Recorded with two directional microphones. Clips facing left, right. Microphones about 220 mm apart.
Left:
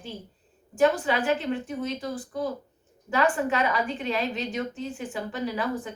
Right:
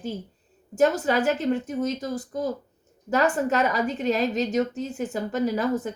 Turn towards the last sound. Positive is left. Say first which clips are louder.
# right 5 dB
turn(degrees=-40)  # may be behind; listen again after turning